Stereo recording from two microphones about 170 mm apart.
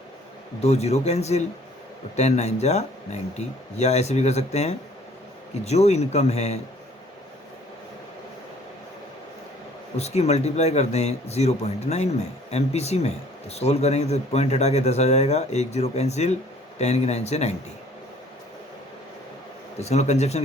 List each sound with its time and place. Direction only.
0.6 s a man's voice: 40° left (ahead or behind)
10.0 s a man's voice: 40° left (ahead or behind)
19.8 s a man's voice: 40° left (ahead or behind)